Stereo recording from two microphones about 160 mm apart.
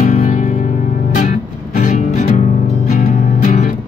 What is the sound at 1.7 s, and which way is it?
Music, 50° left (ahead or behind).